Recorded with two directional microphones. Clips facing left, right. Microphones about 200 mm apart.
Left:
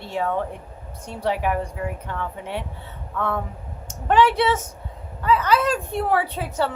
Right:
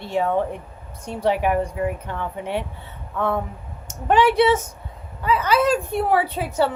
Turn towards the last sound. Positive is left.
turn(degrees=-10)  # may be behind; listen again after turning